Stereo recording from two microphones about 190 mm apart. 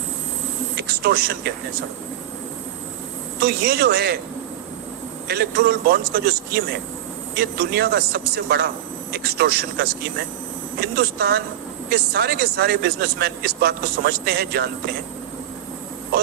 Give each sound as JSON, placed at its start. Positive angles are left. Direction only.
{"t": 0.8, "sound": "speech", "side_deg": -55}
{"t": 3.4, "sound": "speech", "side_deg": -55}
{"t": 5.3, "sound": "speech", "side_deg": -55}